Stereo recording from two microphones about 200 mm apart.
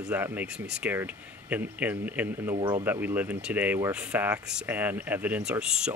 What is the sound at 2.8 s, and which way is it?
Speech, 10° right (ahead or behind).